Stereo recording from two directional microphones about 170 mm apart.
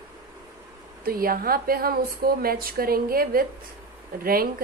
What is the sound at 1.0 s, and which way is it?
A woman's voice, 60° right (ahead or behind).